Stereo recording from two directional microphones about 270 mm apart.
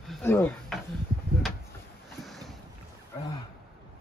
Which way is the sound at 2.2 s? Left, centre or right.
Centre.